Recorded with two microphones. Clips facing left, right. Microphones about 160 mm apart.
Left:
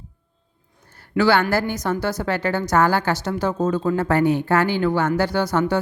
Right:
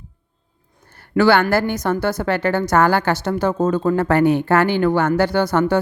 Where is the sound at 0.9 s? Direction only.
55° right (ahead or behind).